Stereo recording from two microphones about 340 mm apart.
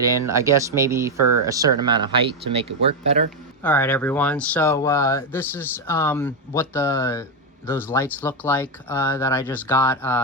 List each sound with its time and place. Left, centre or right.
0.0 s speech: centre
3.6 s speech: centre